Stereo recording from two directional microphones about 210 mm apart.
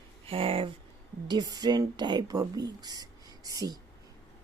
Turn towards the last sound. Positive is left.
turn(degrees=-15)  # may be behind; listen again after turning